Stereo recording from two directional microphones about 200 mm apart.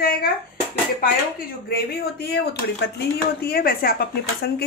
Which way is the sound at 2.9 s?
50° left (ahead or behind).